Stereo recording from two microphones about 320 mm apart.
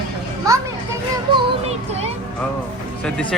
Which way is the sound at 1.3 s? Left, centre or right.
Centre.